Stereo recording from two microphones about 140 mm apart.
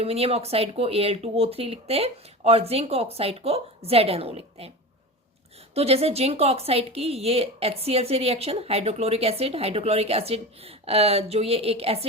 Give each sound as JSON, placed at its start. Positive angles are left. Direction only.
{"t": 0.0, "sound": "speech", "side_deg": -45}
{"t": 5.7, "sound": "speech", "side_deg": -45}